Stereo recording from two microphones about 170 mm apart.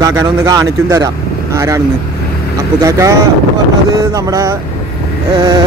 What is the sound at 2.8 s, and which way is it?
Speech, 15° right (ahead or behind).